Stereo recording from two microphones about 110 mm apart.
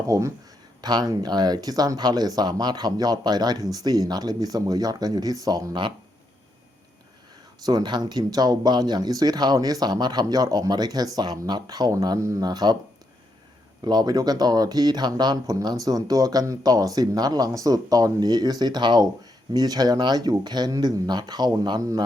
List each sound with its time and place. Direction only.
0.1 s speech: 25° right (ahead or behind)
0.8 s speech: 40° right (ahead or behind)
7.6 s speech: 40° right (ahead or behind)
13.8 s speech: 40° right (ahead or behind)